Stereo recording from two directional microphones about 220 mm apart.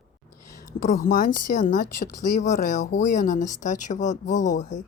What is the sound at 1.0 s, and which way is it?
Speech, 35° left (ahead or behind).